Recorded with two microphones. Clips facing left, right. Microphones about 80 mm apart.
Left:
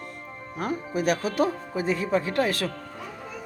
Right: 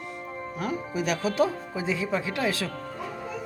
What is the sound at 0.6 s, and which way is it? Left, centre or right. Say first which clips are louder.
Speech: left 2 dB; left.